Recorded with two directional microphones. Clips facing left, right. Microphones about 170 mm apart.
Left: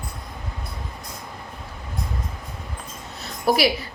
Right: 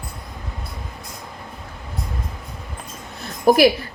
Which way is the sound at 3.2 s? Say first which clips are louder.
Right 6 dB; 50° right (ahead or behind).